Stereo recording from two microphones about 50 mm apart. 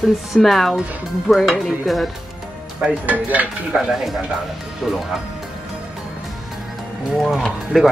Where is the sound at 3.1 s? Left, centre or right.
Right.